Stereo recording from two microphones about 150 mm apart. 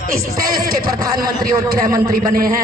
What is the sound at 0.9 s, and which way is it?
Speech, 25° right (ahead or behind).